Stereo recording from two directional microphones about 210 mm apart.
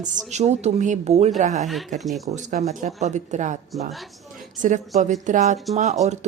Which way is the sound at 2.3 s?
35° right (ahead or behind).